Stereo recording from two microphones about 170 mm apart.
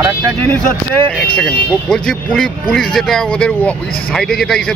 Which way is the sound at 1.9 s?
5° left (ahead or behind).